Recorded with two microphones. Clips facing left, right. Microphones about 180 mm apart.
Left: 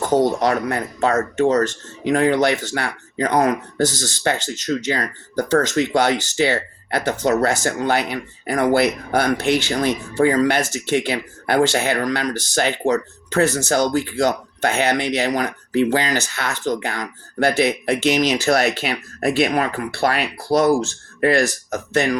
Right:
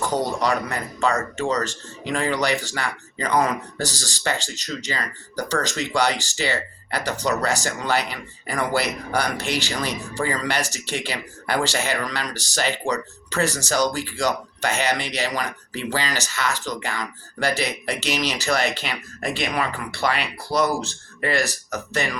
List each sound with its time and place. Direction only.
0.4 s speech: 50° left (ahead or behind)